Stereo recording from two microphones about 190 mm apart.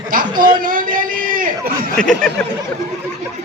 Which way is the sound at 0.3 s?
25° right (ahead or behind).